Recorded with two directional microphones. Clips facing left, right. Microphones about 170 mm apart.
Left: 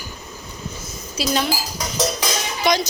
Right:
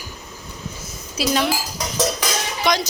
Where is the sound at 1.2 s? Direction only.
Centre (ahead or behind).